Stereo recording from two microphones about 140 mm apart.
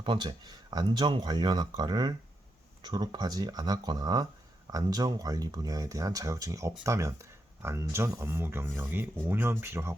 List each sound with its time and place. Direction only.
0.0 s speech: 35° right (ahead or behind); by 9.9 s 15° right (ahead or behind)